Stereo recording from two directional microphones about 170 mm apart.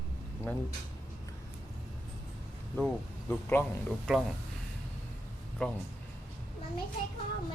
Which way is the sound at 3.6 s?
15° left (ahead or behind).